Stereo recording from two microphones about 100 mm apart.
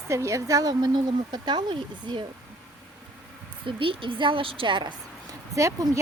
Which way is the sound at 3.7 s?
60° right (ahead or behind).